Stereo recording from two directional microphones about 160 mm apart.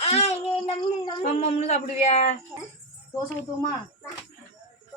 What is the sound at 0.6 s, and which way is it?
Speech, 25° left (ahead or behind).